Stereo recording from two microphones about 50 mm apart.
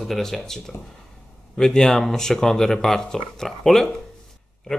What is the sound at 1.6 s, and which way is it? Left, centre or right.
Speech, centre.